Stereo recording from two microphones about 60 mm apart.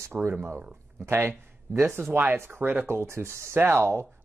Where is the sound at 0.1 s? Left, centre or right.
Centre.